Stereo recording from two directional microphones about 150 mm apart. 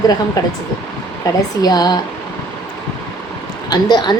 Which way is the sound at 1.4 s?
25° left (ahead or behind).